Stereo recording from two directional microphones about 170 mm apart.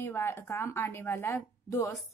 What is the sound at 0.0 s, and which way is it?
Speech, 15° left (ahead or behind).